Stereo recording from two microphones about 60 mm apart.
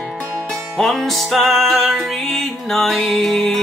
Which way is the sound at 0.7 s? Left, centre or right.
Centre.